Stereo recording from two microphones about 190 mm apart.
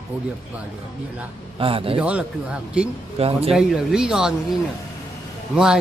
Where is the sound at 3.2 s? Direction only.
30° right (ahead or behind).